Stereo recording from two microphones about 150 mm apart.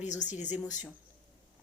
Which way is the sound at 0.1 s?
55° left (ahead or behind).